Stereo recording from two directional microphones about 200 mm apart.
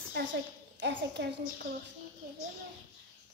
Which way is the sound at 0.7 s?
60° right (ahead or behind).